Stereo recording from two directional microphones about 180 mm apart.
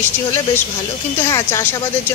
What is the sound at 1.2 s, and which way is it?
Speech, 15° left (ahead or behind).